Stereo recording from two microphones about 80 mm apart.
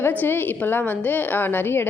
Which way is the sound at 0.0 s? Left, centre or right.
Left.